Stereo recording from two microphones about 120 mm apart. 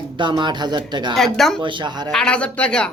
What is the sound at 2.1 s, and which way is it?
Speech, 5° left (ahead or behind).